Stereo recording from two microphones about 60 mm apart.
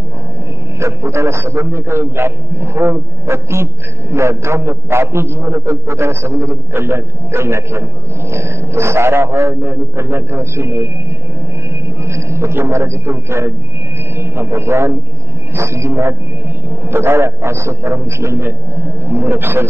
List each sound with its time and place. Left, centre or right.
0.7 s a man's voice: right
6.7 s a man's voice: right
12.0 s a man's voice: right